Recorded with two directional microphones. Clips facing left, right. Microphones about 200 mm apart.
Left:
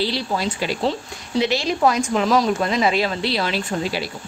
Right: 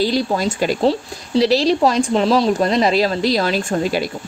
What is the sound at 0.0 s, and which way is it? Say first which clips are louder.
Speech: right 5 dB; 45° right (ahead or behind).